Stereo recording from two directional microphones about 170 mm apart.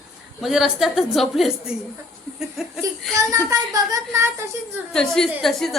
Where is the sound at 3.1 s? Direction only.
20° right (ahead or behind).